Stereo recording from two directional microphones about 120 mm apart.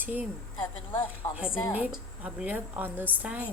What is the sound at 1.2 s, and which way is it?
Speech, 35° left (ahead or behind).